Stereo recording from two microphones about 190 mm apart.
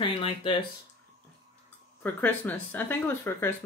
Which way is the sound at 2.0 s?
10° left (ahead or behind).